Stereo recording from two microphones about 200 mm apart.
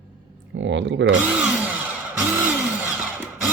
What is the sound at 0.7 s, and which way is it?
Drill, 65° right (ahead or behind).